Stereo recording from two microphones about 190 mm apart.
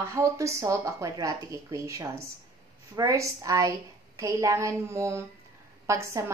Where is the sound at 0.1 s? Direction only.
15° right (ahead or behind).